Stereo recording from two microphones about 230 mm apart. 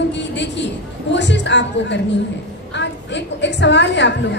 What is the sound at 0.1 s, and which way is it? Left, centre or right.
A woman's voice, left.